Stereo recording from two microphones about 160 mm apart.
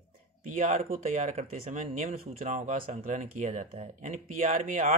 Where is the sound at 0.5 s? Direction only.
55° right (ahead or behind).